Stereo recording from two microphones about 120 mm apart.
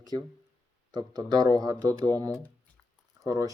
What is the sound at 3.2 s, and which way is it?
Speech, 30° right (ahead or behind).